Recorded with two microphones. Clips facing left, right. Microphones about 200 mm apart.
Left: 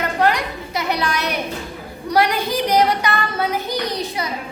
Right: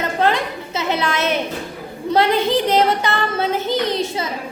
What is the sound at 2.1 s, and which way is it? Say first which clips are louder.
Child singing: right 2 dB; 25° right (ahead or behind).